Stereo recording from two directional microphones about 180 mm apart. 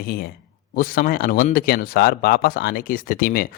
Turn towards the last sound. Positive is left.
turn(degrees=55)  # may be behind; listen again after turning